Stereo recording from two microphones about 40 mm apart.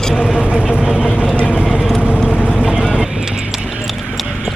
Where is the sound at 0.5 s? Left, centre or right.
Right.